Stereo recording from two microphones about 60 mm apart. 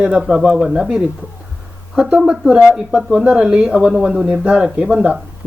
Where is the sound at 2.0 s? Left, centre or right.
Centre.